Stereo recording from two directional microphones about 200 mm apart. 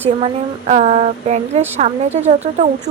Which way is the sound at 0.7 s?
35° right (ahead or behind).